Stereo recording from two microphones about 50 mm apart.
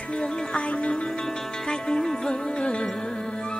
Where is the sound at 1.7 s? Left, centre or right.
Centre.